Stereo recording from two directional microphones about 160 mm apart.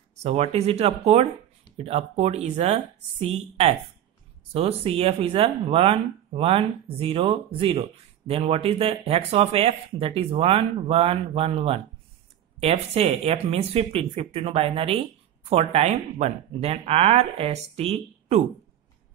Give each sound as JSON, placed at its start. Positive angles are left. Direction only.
{"t": 0.2, "sound": "speech", "side_deg": -40}